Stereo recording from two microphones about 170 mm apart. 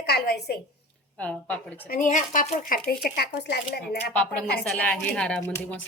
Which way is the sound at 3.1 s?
70° left (ahead or behind).